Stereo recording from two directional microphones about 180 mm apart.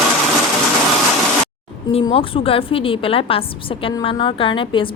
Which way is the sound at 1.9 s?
30° left (ahead or behind).